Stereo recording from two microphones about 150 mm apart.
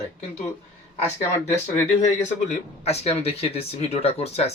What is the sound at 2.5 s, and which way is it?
Speech, 45° left (ahead or behind).